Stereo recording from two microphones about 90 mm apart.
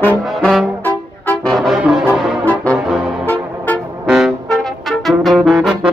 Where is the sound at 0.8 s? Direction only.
20° left (ahead or behind).